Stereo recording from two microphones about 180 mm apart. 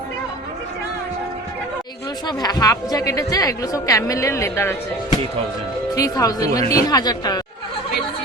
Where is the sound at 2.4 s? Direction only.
20° left (ahead or behind).